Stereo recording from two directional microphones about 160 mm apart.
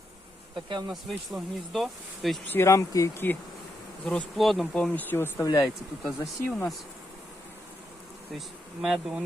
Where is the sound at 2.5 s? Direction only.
15° left (ahead or behind).